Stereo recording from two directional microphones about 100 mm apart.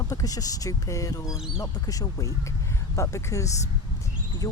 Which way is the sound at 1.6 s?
40° left (ahead or behind).